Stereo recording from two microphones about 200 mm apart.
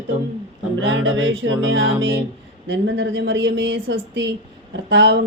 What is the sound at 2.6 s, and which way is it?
A woman's voice, 65° right (ahead or behind).